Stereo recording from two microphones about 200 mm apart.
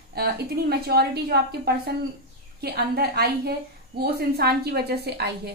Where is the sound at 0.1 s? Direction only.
50° right (ahead or behind).